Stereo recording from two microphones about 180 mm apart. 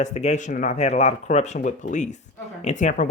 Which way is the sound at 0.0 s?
40° left (ahead or behind).